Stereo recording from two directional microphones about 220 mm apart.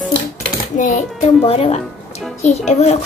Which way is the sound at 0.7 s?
35° left (ahead or behind).